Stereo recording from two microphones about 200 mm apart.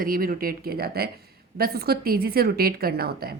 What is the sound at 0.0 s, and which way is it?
A woman's voice, 45° right (ahead or behind).